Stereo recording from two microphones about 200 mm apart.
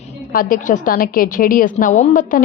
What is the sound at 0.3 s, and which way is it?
A woman's voice, 45° left (ahead or behind).